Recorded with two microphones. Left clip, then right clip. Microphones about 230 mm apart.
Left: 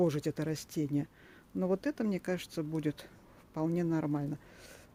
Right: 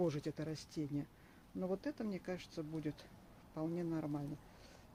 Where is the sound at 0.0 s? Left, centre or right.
Left.